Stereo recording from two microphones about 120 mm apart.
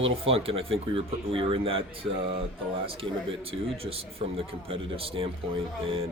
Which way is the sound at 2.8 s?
50° right (ahead or behind).